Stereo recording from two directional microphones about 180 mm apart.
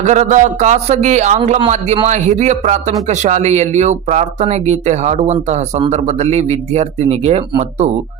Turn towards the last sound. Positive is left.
turn(degrees=-40)  # may be behind; listen again after turning